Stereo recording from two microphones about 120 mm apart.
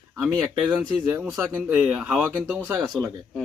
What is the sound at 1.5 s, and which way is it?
Speech, 20° right (ahead or behind).